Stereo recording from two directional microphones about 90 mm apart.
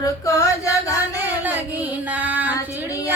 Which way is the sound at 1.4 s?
20° right (ahead or behind).